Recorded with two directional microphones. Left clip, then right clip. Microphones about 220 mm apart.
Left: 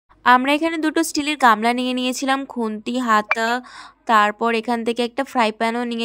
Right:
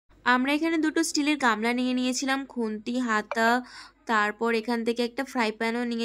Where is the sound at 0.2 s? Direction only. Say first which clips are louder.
Left 9 dB; 20° left (ahead or behind).